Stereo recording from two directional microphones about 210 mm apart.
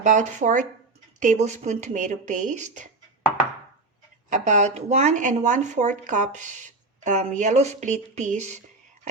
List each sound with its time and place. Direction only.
0.0 s speech: 35° right (ahead or behind)
4.3 s speech: 35° right (ahead or behind)